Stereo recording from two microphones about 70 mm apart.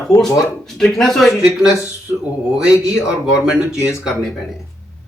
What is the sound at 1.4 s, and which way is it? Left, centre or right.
Speech, centre.